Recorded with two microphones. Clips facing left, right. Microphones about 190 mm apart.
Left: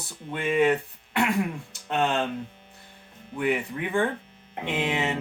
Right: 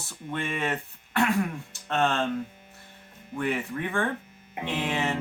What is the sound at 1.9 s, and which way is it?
Speech, 15° left (ahead or behind).